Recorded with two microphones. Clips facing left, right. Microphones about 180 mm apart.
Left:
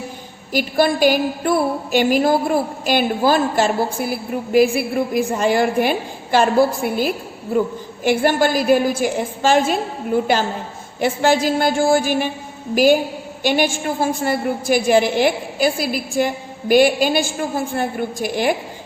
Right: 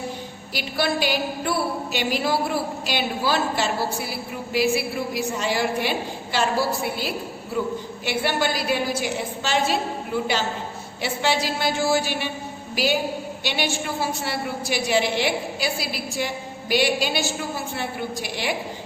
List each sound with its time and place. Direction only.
0.5 s a woman's voice: 50° left (ahead or behind)
11.0 s a woman's voice: 50° left (ahead or behind)